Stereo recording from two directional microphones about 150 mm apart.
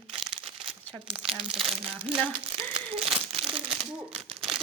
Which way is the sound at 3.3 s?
40° right (ahead or behind).